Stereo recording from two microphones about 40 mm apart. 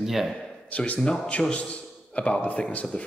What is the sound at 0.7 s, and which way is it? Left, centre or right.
A man's voice, left.